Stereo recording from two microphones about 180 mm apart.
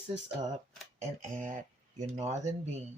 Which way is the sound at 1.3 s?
45° right (ahead or behind).